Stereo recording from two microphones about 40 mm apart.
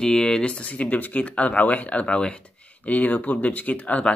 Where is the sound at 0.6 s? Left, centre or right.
Left.